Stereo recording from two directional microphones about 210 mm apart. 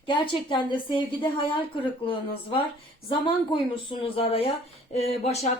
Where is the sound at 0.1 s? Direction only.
25° left (ahead or behind).